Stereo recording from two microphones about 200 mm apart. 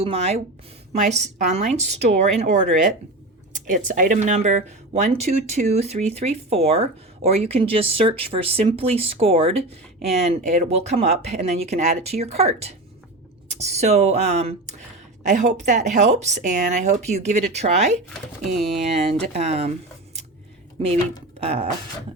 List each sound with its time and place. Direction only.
0.0 s speech: 30° right (ahead or behind)
18.4 s speech: centre (ahead or behind)
19.3 s speech: 35° right (ahead or behind)
21.4 s speech: 30° right (ahead or behind)